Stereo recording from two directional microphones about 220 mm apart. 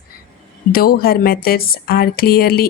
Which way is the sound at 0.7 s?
45° left (ahead or behind).